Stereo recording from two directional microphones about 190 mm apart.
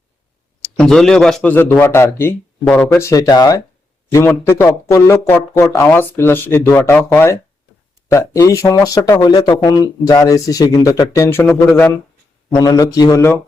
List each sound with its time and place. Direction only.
0.6 s speech: 5° left (ahead or behind)